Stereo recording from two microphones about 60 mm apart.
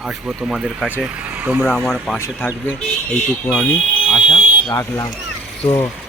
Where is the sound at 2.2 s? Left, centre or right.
Left.